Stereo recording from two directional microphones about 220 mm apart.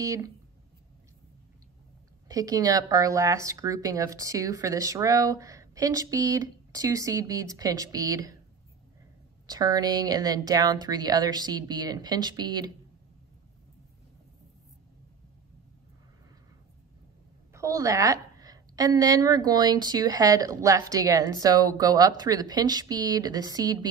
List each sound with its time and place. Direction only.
0.0 s a woman's voice: 15° right (ahead or behind)
2.2 s a woman's voice: 15° right (ahead or behind)
9.5 s a woman's voice: 15° right (ahead or behind)
17.5 s a woman's voice: 15° right (ahead or behind)